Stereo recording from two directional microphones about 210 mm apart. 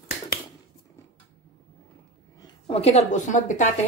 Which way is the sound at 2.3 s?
25° left (ahead or behind).